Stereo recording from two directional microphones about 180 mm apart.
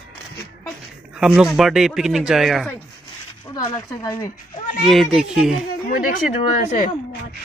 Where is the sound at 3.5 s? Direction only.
20° left (ahead or behind).